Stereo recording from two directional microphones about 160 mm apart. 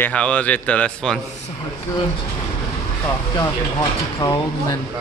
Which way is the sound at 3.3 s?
20° left (ahead or behind).